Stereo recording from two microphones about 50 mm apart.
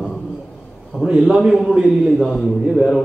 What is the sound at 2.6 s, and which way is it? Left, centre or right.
Mantra, centre.